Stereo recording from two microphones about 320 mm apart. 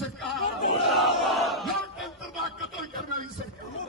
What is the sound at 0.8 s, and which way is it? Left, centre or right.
Battle cry, centre.